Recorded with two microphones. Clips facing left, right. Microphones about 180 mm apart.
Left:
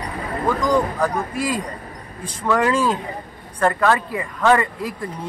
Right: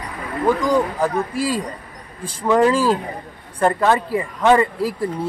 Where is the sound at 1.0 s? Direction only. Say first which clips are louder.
Right 2 dB; 30° right (ahead or behind).